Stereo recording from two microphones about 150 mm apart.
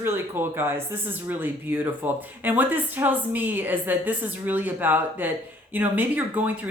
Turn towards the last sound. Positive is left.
turn(degrees=-10)  # may be behind; listen again after turning